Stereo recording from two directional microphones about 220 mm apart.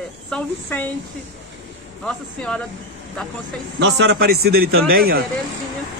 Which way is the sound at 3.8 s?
50° right (ahead or behind).